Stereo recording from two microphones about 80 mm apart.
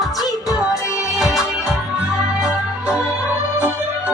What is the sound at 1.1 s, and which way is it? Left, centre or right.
Music, centre.